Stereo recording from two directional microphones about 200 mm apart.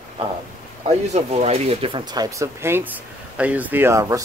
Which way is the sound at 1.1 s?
30° right (ahead or behind).